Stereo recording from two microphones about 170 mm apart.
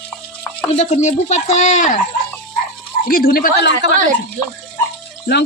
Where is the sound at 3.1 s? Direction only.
60° left (ahead or behind); by 3.9 s 85° left.